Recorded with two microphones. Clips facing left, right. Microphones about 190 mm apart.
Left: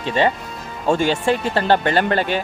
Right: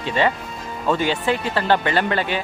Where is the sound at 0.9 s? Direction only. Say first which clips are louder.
Left 3 dB; 45° left (ahead or behind).